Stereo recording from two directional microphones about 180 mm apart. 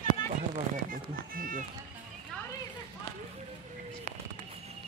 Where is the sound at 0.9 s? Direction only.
50° right (ahead or behind).